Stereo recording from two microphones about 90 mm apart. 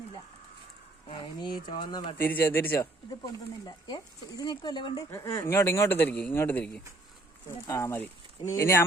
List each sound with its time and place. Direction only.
1.0 s speech: 70° left (ahead or behind)
2.1 s speech: 20° left (ahead or behind)
2.7 s speech: 45° left (ahead or behind)
5.1 s speech: 35° left (ahead or behind)
7.7 s speech: 30° left (ahead or behind)